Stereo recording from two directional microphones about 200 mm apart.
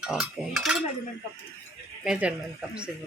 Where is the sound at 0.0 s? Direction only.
5° right (ahead or behind).